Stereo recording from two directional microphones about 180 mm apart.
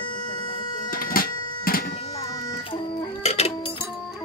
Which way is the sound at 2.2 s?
15° left (ahead or behind).